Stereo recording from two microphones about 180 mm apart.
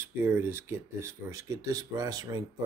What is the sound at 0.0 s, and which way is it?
Speech, 10° right (ahead or behind).